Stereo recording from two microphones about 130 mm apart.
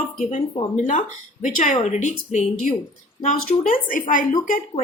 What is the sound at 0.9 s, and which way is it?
A woman's voice, 80° left.